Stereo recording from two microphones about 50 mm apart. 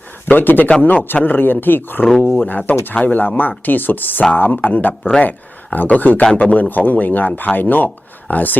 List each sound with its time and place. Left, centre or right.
0.3 s a man's voice: left